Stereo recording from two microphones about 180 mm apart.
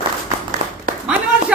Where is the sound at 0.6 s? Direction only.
35° right (ahead or behind).